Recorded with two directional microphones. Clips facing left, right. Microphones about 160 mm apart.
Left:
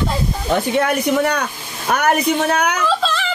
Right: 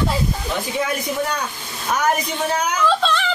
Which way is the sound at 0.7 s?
65° left (ahead or behind).